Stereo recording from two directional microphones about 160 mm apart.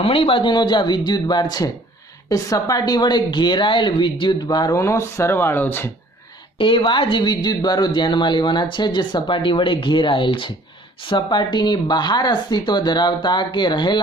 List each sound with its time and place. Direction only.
0.0 s speech: 35° left (ahead or behind); by 5.9 s 10° left (ahead or behind)
6.6 s speech: 30° left (ahead or behind)